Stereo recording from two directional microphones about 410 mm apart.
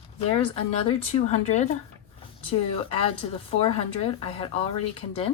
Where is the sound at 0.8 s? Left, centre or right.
Centre.